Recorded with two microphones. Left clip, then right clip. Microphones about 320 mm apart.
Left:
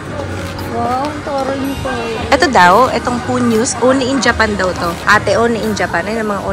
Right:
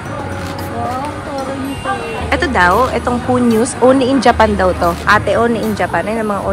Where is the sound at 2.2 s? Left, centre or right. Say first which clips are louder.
Left 4 dB; centre.